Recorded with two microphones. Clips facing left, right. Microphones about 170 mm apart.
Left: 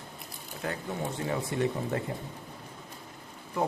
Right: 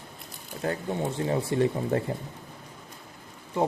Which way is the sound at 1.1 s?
30° right (ahead or behind).